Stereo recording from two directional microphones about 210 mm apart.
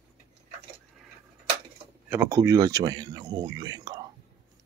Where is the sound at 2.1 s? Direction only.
15° right (ahead or behind).